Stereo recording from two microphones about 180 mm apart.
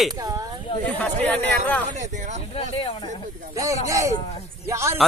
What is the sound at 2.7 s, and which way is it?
Speech, 30° left (ahead or behind).